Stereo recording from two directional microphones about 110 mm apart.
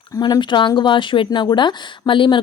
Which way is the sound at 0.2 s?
45° left (ahead or behind).